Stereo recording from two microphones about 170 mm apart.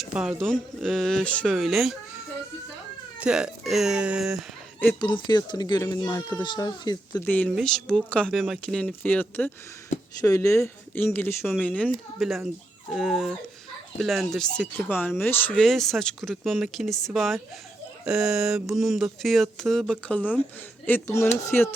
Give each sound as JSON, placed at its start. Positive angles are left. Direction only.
{"t": 0.0, "sound": "speech", "side_deg": -5}
{"t": 3.2, "sound": "speech", "side_deg": -5}
{"t": 4.9, "sound": "speech", "side_deg": 25}
{"t": 6.1, "sound": "speech", "side_deg": 10}
{"t": 6.4, "sound": "speech", "side_deg": 25}
{"t": 7.3, "sound": "speech", "side_deg": 10}